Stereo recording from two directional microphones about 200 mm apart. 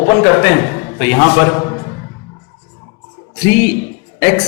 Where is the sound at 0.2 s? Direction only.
15° left (ahead or behind).